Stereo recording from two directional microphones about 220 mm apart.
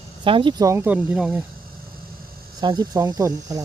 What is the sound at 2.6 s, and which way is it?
Speech, 20° right (ahead or behind).